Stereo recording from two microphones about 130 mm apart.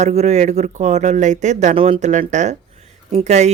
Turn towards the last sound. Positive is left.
turn(degrees=-60)  # may be behind; listen again after turning